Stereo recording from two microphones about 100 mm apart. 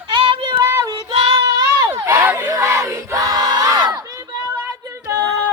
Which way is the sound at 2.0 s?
20° right (ahead or behind).